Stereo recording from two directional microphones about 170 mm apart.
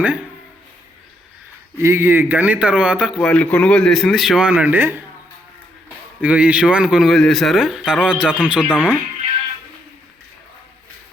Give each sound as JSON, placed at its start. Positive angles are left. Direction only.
{"t": 0.0, "sound": "speech", "side_deg": -5}
{"t": 1.8, "sound": "speech", "side_deg": -15}
{"t": 3.2, "sound": "speech", "side_deg": 5}
{"t": 6.2, "sound": "speech", "side_deg": -10}